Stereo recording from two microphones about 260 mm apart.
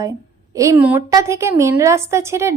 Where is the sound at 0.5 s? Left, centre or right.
Centre.